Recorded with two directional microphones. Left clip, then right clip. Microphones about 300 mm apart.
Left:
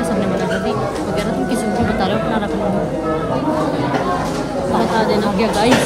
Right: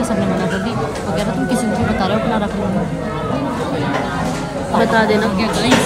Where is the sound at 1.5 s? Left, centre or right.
Centre.